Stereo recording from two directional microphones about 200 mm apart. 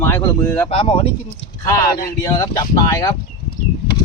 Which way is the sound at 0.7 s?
30° left (ahead or behind).